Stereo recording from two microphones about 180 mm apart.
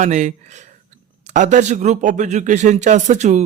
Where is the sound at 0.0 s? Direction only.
40° right (ahead or behind).